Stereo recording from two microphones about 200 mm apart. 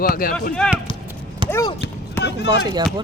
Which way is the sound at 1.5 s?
15° left (ahead or behind).